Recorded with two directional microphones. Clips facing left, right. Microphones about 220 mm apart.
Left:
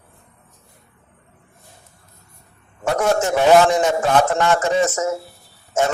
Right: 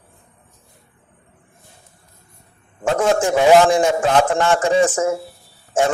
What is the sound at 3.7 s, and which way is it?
A man's voice, 30° right (ahead or behind).